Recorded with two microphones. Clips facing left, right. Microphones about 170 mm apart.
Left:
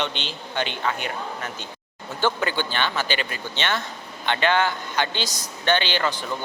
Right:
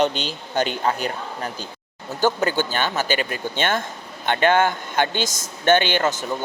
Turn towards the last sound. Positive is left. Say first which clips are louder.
# right 4 dB
turn(degrees=-45)  # may be behind; listen again after turning